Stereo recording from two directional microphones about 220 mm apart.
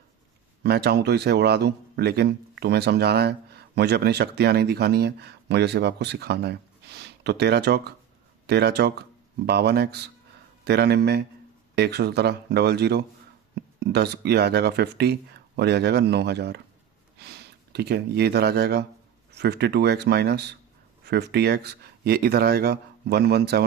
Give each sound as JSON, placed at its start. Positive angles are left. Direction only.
{"t": 0.6, "sound": "speech", "side_deg": -50}